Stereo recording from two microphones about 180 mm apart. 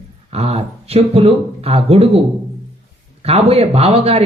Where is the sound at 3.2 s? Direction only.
35° right (ahead or behind).